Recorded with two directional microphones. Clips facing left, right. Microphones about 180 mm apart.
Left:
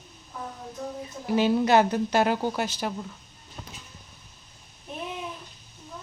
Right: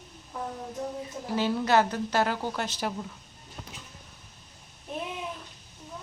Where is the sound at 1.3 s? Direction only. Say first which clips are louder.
Left 4 dB; 20° left (ahead or behind).